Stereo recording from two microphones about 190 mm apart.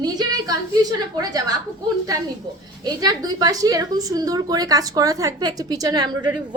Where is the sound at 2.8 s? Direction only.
20° right (ahead or behind).